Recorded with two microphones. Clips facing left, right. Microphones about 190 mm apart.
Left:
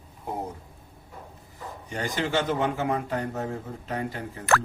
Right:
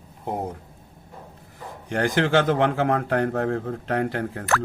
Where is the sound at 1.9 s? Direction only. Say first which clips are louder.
Right 7 dB; 70° right (ahead or behind).